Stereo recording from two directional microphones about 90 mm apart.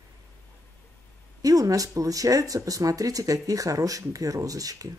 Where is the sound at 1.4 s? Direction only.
40° right (ahead or behind).